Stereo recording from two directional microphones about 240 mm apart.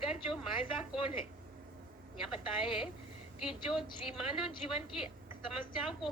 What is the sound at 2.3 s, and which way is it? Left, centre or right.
A woman's voice, centre.